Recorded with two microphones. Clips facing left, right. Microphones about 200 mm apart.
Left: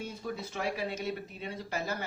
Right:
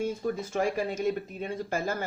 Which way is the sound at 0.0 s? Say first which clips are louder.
Right 8 dB; 50° right (ahead or behind).